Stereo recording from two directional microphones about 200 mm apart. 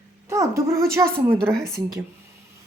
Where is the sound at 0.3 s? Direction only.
15° right (ahead or behind).